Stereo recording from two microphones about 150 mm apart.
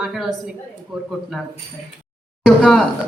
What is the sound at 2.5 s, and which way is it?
Speech, centre (ahead or behind).